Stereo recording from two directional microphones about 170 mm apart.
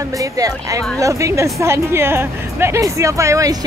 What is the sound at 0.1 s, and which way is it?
A woman's voice, 20° right (ahead or behind).